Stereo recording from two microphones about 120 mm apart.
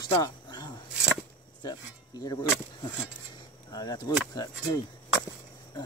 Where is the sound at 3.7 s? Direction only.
35° left (ahead or behind).